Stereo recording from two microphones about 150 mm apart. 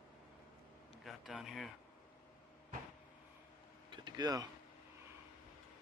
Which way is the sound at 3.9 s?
30° right (ahead or behind).